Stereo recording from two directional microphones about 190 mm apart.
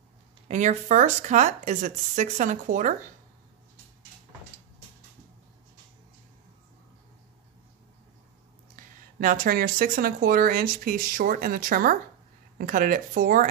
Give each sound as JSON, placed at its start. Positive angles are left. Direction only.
{"t": 0.5, "sound": "speech", "side_deg": -40}
{"t": 8.7, "sound": "speech", "side_deg": -45}